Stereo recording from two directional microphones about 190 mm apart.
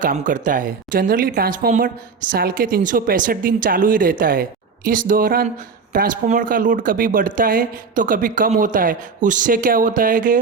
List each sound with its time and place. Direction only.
0.0 s speech: 45° right (ahead or behind)